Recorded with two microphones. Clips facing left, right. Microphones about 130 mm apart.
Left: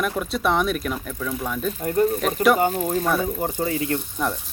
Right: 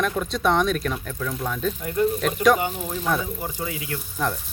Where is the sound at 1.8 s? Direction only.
40° left (ahead or behind).